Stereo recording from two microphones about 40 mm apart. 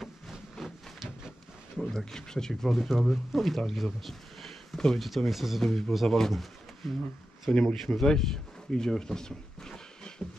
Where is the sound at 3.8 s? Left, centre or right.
Centre.